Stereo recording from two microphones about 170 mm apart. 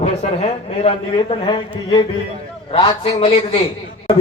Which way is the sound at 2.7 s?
35° left (ahead or behind).